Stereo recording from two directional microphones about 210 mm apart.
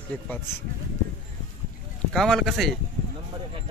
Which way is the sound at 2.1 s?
Centre (ahead or behind).